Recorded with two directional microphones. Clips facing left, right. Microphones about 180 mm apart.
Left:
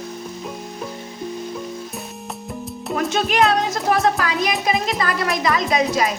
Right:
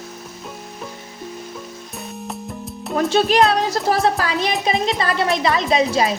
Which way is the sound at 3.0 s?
35° right (ahead or behind).